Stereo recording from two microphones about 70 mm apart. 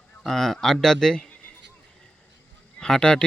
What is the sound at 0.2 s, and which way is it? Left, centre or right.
Speech, centre.